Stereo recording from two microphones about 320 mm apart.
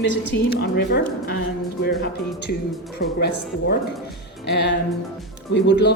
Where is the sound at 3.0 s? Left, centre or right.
Left.